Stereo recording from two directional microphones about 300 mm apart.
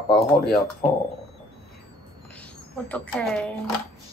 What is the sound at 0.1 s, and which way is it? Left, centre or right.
Speech, centre.